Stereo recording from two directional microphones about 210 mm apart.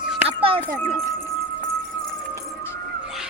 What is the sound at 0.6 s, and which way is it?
Speech, 10° left (ahead or behind).